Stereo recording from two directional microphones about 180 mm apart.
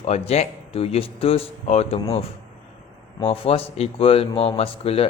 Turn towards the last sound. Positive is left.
turn(degrees=30)  # may be behind; listen again after turning